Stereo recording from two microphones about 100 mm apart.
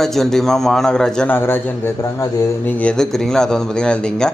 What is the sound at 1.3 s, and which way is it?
Speech, 20° left (ahead or behind).